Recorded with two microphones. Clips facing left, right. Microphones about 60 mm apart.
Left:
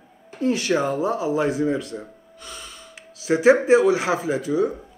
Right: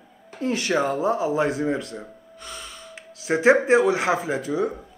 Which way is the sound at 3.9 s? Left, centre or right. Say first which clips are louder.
Left 1 dB; right.